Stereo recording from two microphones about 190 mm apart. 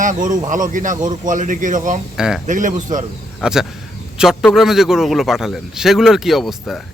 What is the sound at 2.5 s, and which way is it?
Speech, 40° right (ahead or behind).